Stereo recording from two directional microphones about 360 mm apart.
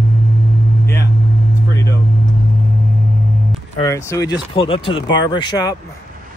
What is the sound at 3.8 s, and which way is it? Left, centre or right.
Speech, centre.